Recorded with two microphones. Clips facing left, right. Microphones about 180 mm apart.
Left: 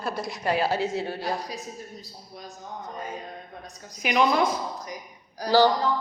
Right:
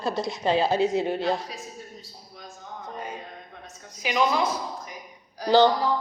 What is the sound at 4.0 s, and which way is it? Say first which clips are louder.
Speech: left 2 dB; 60° left (ahead or behind).